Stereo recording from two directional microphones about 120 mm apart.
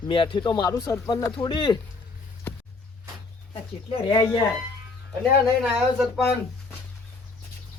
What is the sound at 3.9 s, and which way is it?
Speech, 50° left (ahead or behind).